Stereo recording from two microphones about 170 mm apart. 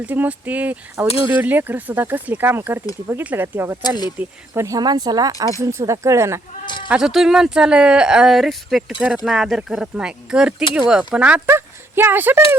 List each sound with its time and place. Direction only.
0.0 s speech: 10° right (ahead or behind)
3.8 s speech: 25° left (ahead or behind)
4.2 s speech: 15° right (ahead or behind)
6.8 s speech: 5° right (ahead or behind)